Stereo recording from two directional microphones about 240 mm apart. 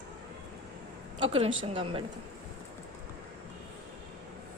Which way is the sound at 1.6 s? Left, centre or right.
Right.